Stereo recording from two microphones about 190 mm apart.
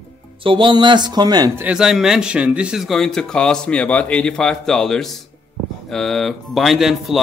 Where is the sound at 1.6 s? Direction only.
5° right (ahead or behind).